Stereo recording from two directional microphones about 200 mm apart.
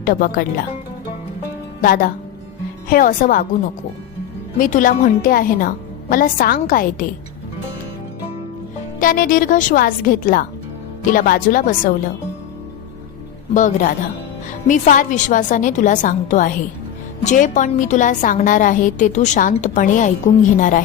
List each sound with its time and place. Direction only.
0.0 s a woman's voice: 45° left (ahead or behind)
1.8 s a woman's voice: 45° left (ahead or behind)
4.5 s a woman's voice: 40° left (ahead or behind)
9.0 s a woman's voice: 45° left (ahead or behind)
13.5 s a woman's voice: 40° left (ahead or behind)